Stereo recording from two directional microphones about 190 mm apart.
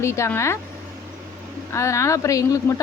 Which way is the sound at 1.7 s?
15° left (ahead or behind).